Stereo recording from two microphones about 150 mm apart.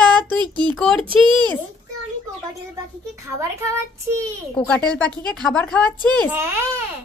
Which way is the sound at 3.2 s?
20° right (ahead or behind).